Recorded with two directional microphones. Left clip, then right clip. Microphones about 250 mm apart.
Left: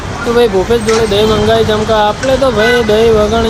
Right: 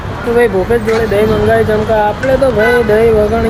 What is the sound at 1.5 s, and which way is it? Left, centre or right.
Speech, centre.